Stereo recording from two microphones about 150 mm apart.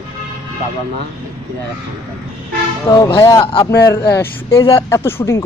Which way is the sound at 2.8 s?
20° left (ahead or behind).